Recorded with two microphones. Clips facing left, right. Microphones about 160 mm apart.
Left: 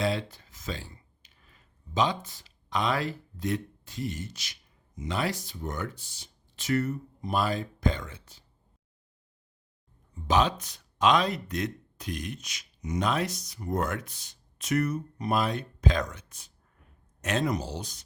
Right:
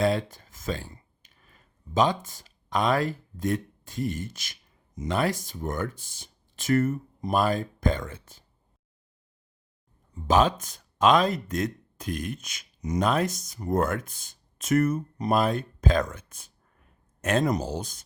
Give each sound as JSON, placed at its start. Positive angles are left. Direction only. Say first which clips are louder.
{"t": 0.0, "sound": "speech", "louder": "right 4 dB", "side_deg": -50}
{"t": 10.2, "sound": "speech", "louder": "right 3 dB", "side_deg": -45}